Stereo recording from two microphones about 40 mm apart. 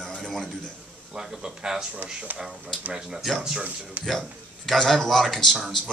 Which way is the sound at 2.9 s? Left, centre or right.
Centre.